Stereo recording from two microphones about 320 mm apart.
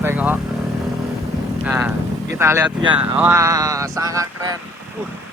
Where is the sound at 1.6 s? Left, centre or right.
Centre.